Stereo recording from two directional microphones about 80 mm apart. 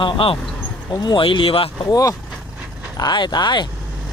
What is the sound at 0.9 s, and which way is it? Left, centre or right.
Speech, left.